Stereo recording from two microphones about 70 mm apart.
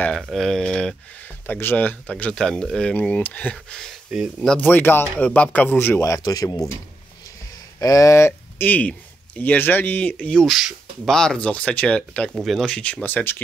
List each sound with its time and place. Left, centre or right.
0.1 s speech: centre
1.5 s a man's voice: left
2.3 s a man's voice: centre; by 3.5 s left
4.1 s speech: centre
4.6 s a man's voice: left
6.2 s speech: left
7.8 s speech: left
10.5 s speech: centre
11.1 s speech: centre
12.4 s speech: centre
12.6 s speech: centre
13.0 s a man's voice: left